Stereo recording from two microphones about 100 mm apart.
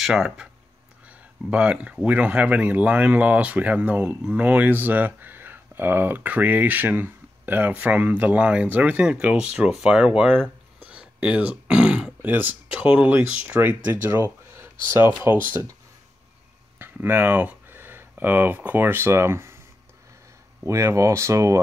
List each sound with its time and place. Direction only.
0.0 s speech: 5° right (ahead or behind)
1.0 s a sound: 10° right (ahead or behind)
2.0 s speech: 15° right (ahead or behind)
10.8 s throat clearing: 10° right (ahead or behind)
12.3 s speech: 20° right (ahead or behind)
16.7 s speech: 20° right (ahead or behind)
20.6 s speech: 30° right (ahead or behind)